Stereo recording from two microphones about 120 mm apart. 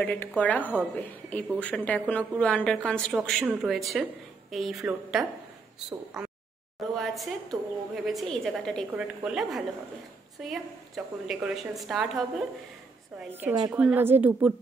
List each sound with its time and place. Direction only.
0.0 s a woman's voice: 10° left (ahead or behind)
8.9 s a woman's voice: 10° right (ahead or behind)
13.3 s a woman's voice: 20° right (ahead or behind)
13.7 s a woman's voice: 5° right (ahead or behind)